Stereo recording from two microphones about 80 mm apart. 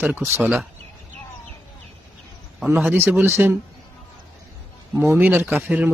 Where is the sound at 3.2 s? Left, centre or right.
Right.